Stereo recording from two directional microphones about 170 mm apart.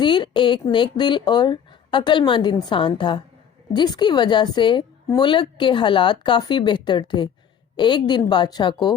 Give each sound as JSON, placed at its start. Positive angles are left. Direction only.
{"t": 0.0, "sound": "a woman's voice", "side_deg": 30}